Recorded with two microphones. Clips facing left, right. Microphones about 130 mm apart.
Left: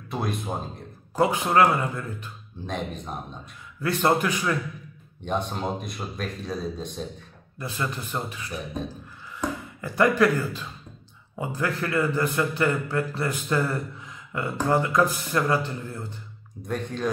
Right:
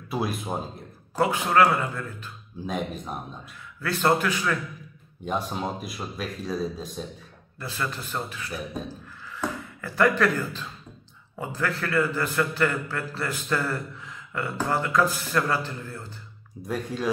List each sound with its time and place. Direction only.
0.1 s speech: 5° right (ahead or behind)
1.2 s a man's voice: 20° left (ahead or behind)
2.6 s speech: 5° right (ahead or behind)
3.8 s a man's voice: 20° left (ahead or behind)
5.2 s speech: 5° right (ahead or behind)
7.5 s a man's voice: 20° left (ahead or behind)
9.8 s a man's voice: 20° left (ahead or behind)
16.6 s speech: 5° right (ahead or behind)